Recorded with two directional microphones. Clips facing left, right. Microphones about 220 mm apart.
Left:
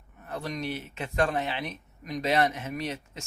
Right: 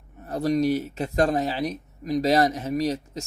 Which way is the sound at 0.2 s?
40° right (ahead or behind).